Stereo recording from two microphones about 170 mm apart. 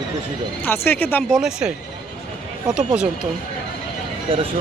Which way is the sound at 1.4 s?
5° right (ahead or behind).